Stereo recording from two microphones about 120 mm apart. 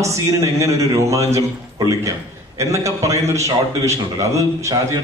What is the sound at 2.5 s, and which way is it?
A man's voice, 25° right (ahead or behind).